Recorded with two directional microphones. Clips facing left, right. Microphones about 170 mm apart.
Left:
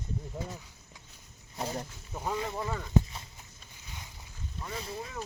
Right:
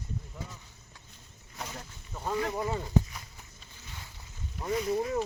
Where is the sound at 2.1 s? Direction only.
10° left (ahead or behind).